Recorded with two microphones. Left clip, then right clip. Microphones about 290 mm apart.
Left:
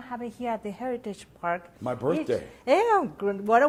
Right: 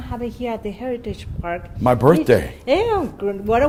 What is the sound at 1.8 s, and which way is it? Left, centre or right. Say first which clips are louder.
Speech: right 14 dB; right.